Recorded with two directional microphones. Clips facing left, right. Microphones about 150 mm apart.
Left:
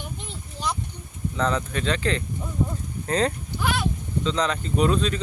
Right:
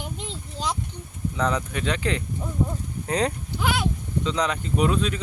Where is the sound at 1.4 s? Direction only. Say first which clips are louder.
Left 1 dB; 10° right (ahead or behind).